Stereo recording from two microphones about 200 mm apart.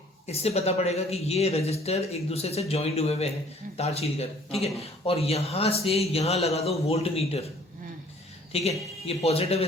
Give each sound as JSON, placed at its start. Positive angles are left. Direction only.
{"t": 0.3, "sound": "speech", "side_deg": 30}
{"t": 8.5, "sound": "speech", "side_deg": 30}